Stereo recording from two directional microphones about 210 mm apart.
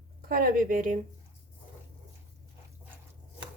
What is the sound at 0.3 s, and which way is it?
Speech, 45° right (ahead or behind).